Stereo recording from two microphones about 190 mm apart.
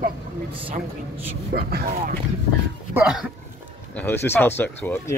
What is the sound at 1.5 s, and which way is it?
Speech, 50° right (ahead or behind).